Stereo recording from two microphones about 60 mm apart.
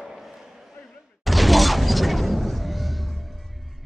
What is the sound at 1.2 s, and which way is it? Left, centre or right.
Shatter, centre.